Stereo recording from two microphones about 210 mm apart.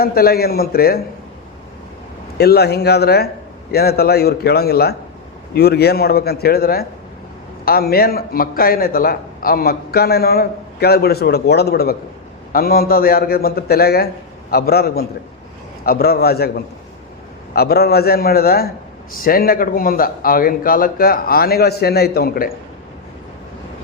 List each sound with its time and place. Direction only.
0.0 s a man's voice: 45° left (ahead or behind)
2.4 s a man's voice: 50° left (ahead or behind)